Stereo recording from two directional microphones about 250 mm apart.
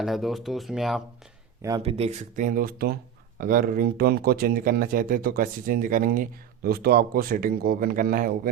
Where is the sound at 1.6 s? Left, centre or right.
Centre.